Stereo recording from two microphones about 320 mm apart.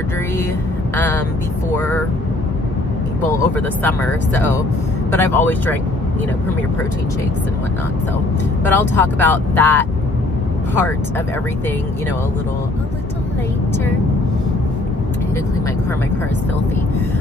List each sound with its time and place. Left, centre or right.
0.9 s speech: centre
3.2 s speech: left
3.5 s speech: centre
8.6 s speech: centre